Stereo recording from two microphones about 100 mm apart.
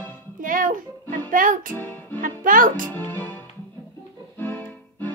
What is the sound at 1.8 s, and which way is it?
Music, 20° left (ahead or behind).